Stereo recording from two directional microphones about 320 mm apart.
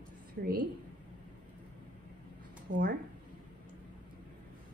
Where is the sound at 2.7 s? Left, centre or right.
Right.